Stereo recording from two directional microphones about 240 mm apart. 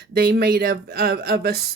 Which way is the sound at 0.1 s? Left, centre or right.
Right.